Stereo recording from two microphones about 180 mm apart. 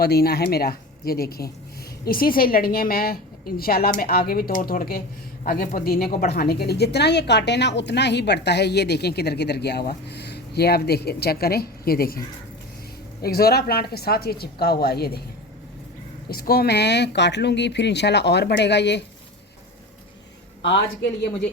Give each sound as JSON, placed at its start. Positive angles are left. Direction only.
{"t": 0.0, "sound": "a woman's voice", "side_deg": 60}
{"t": 13.2, "sound": "a woman's voice", "side_deg": 60}
{"t": 16.3, "sound": "speech", "side_deg": 60}
{"t": 20.6, "sound": "speech", "side_deg": 80}